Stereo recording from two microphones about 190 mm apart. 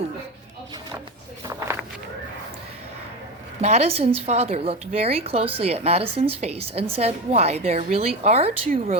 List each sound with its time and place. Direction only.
1.5 s walk: 15° right (ahead or behind)
3.6 s a woman's voice: 35° right (ahead or behind)